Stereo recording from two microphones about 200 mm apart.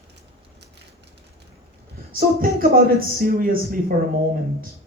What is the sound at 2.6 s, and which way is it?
Speech, 45° right (ahead or behind).